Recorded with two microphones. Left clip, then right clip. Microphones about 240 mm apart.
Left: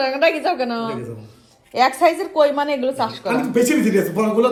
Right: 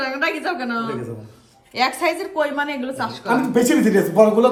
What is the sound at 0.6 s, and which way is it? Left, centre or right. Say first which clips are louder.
Speech: left 2 dB; centre.